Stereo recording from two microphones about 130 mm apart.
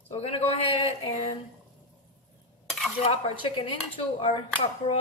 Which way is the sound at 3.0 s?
45° left (ahead or behind).